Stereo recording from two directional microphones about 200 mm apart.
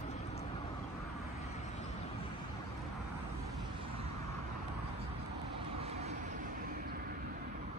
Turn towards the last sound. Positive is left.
turn(degrees=-35)  # may be behind; listen again after turning